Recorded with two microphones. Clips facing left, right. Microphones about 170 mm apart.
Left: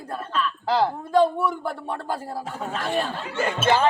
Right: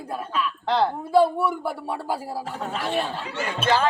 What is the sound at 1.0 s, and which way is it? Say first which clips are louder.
A woman's voice: right 1 dB; 10° right (ahead or behind).